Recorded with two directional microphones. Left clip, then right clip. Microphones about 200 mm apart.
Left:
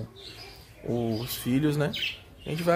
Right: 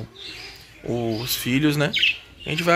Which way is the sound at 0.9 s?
20° right (ahead or behind).